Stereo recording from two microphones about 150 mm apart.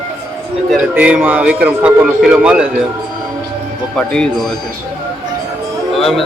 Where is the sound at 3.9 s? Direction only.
5° left (ahead or behind).